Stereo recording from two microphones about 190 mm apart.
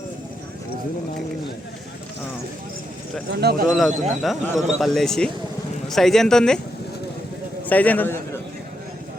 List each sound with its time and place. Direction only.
3.3 s speech: 60° right (ahead or behind)
3.7 s speech: centre (ahead or behind)
7.7 s a man's voice: 10° left (ahead or behind)